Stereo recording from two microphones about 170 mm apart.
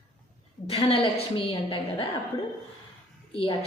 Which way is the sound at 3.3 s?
35° left (ahead or behind).